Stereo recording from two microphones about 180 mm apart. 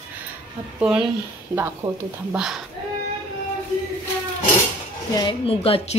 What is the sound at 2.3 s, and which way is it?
Speech, 5° right (ahead or behind).